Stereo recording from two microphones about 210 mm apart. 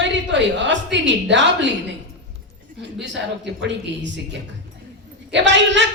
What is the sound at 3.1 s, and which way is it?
Speech, 60° right (ahead or behind).